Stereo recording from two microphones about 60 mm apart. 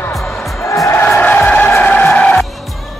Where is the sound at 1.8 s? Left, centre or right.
Left.